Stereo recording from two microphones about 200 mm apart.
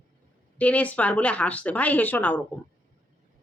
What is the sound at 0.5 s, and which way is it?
Speech, 5° left (ahead or behind).